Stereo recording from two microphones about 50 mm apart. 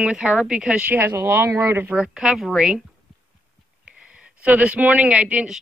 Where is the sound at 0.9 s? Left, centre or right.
Right.